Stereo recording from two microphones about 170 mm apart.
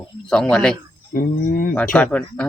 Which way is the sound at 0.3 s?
5° left (ahead or behind).